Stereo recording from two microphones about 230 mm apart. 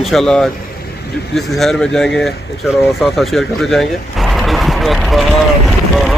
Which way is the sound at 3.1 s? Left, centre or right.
Centre.